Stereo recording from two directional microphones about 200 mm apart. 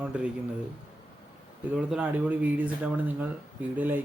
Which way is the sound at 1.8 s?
5° right (ahead or behind).